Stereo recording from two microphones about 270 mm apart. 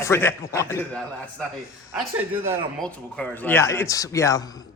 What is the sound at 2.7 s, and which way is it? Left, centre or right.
A man's voice, centre.